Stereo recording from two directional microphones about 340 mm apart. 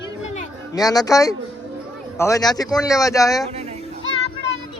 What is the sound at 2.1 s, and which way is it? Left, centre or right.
Speech, centre.